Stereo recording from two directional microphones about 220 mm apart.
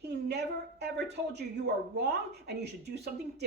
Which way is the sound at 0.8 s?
50° right (ahead or behind).